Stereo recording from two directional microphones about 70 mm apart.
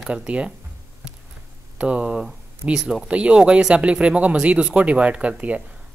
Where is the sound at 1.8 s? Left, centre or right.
Centre.